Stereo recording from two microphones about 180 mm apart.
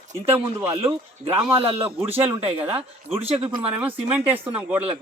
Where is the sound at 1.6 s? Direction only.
35° right (ahead or behind).